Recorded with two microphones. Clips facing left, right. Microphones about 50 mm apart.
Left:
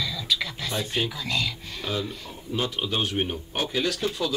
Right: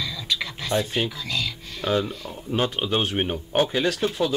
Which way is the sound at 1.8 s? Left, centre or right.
Right.